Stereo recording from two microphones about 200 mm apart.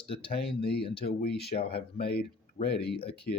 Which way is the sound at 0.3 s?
50° left (ahead or behind).